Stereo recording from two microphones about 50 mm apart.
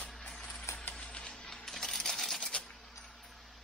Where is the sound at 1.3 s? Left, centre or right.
Centre.